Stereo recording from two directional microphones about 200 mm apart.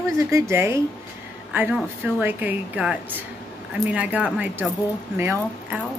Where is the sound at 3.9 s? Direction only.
5° right (ahead or behind).